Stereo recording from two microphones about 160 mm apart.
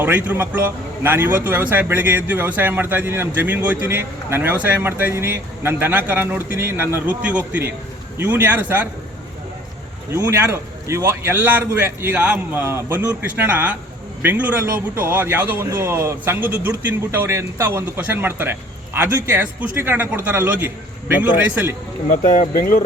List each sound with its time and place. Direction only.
0.0 s speech: 10° right (ahead or behind)
10.1 s speech: 15° right (ahead or behind)
22.1 s speech: 60° left (ahead or behind)